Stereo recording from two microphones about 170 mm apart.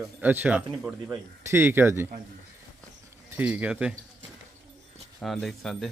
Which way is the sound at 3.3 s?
10° right (ahead or behind).